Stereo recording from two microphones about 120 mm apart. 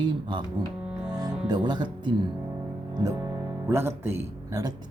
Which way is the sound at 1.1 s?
35° right (ahead or behind).